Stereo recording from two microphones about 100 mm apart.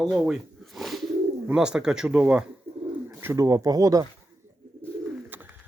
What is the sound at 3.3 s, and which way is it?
Speech, 35° right (ahead or behind).